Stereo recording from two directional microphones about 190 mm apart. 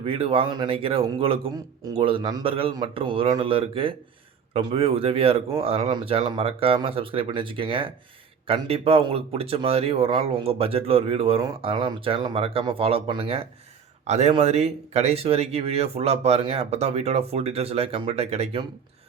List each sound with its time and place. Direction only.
0.0 s a man's voice: 30° right (ahead or behind)